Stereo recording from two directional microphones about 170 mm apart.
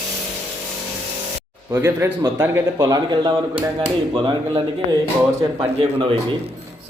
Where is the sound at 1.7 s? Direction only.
15° right (ahead or behind); by 3.7 s 30° right (ahead or behind).